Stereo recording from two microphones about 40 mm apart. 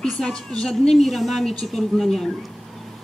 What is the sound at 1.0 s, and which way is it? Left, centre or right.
Speech, centre.